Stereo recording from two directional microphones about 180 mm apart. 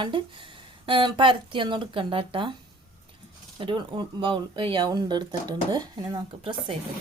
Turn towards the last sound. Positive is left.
turn(degrees=-30)  # may be behind; listen again after turning